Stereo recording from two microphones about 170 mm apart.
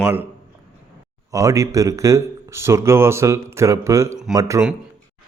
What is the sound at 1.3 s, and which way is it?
Speech, 20° right (ahead or behind).